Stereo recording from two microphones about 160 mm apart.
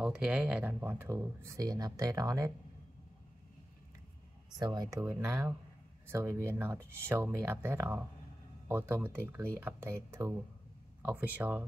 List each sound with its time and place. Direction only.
0.0 s speech: 5° right (ahead or behind); by 2.5 s 20° right (ahead or behind)
4.6 s speech: 25° right (ahead or behind)